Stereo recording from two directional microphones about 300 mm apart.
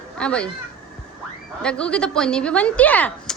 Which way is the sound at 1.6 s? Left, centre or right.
Centre.